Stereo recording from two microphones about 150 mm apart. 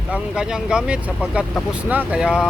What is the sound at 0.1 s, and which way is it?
Speech, 5° right (ahead or behind).